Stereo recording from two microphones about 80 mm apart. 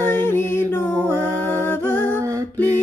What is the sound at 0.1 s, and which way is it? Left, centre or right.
Music, left.